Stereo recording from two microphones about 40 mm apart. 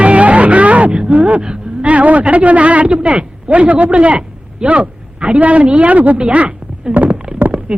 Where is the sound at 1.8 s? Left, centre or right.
Right.